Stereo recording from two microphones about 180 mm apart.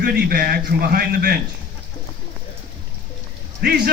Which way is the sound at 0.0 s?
60° right (ahead or behind).